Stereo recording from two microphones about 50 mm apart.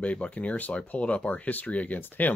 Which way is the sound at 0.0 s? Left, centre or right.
Left.